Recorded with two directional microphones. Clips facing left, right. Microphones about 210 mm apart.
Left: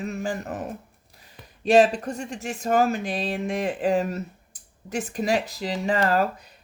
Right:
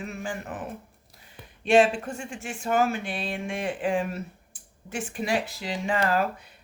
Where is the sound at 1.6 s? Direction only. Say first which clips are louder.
Left 2 dB; 40° left (ahead or behind).